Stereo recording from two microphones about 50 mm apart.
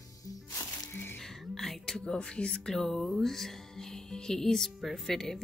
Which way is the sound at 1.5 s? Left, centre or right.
Centre.